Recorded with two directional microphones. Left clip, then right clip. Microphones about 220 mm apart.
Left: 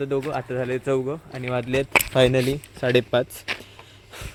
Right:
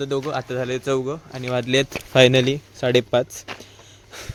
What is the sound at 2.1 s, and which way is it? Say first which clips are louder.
Speech: right 9 dB; 20° right (ahead or behind).